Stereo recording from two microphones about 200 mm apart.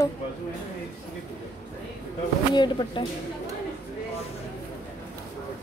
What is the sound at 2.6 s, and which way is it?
Speech, 25° left (ahead or behind).